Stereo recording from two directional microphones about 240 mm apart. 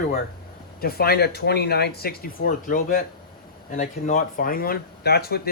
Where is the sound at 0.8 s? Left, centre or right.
Left.